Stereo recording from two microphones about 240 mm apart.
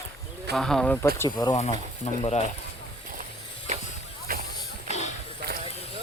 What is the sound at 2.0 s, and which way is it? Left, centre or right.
Speech, left.